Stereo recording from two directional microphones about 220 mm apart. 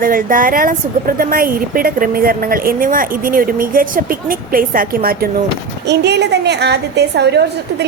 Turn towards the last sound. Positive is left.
turn(degrees=-50)  # may be behind; listen again after turning